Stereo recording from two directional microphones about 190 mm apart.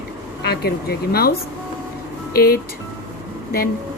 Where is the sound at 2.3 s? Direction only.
50° left (ahead or behind).